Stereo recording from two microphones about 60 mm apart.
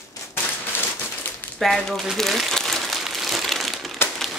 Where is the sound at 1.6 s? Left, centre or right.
Centre.